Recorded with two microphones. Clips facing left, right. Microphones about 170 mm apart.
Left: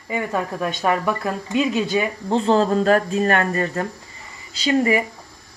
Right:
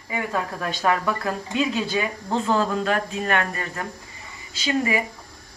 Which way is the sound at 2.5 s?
35° left (ahead or behind).